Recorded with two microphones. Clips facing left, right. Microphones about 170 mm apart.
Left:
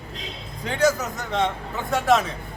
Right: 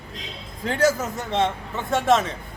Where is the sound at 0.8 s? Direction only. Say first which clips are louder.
Even; 30° right (ahead or behind).